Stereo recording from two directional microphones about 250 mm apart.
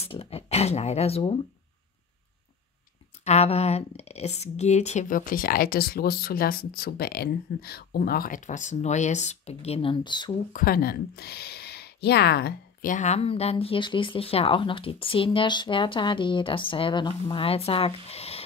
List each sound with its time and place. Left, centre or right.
0.0 s speech: left
3.3 s speech: left
10.5 s speech: left